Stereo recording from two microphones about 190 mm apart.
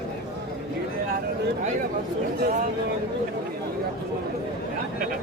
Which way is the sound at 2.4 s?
50° right (ahead or behind).